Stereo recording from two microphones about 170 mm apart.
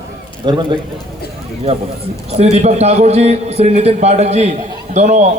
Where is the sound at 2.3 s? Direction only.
40° right (ahead or behind).